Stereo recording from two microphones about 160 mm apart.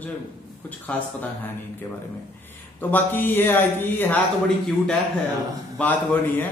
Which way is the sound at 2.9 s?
10° left (ahead or behind).